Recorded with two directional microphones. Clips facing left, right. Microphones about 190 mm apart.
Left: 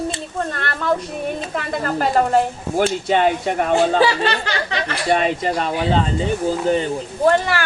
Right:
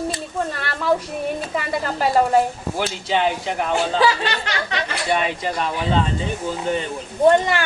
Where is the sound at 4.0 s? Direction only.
30° left (ahead or behind).